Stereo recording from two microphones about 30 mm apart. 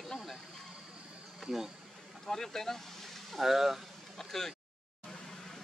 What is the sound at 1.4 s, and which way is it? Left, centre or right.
Speech, centre.